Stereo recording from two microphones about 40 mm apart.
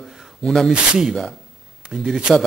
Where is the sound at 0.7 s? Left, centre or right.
Right.